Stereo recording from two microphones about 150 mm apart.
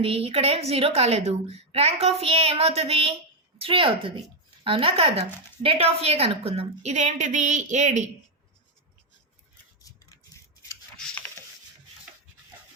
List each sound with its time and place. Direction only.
0.0 s a woman's voice: 40° right (ahead or behind)
9.8 s toothbrush: 20° left (ahead or behind)
10.9 s a sound: 10° left (ahead or behind)